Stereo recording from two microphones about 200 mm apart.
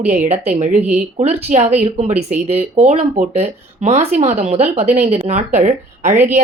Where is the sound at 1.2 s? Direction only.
35° right (ahead or behind).